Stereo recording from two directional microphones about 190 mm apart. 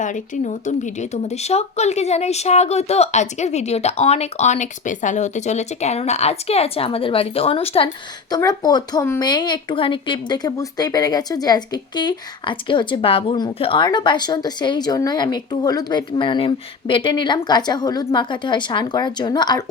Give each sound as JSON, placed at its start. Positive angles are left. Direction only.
{"t": 0.0, "sound": "speech", "side_deg": 40}
{"t": 8.3, "sound": "speech", "side_deg": 20}